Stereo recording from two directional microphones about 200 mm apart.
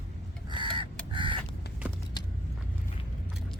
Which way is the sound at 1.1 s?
25° right (ahead or behind).